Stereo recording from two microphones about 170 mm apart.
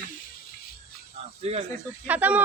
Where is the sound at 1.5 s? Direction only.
40° right (ahead or behind).